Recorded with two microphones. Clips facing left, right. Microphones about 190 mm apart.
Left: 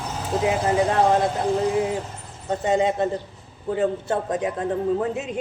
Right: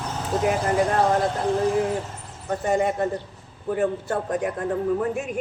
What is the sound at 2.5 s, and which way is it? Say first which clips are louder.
A man's voice: left 1 dB; 20° left (ahead or behind).